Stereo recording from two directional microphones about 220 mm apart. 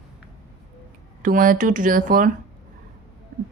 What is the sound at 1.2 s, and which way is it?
A woman's voice, 40° right (ahead or behind).